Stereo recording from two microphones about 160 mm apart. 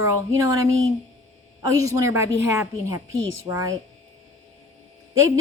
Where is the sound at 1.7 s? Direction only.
20° right (ahead or behind).